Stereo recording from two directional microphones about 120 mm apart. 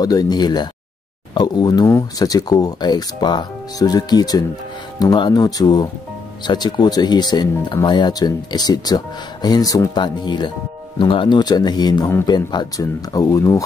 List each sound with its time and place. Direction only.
0.0 s speech: 30° left (ahead or behind)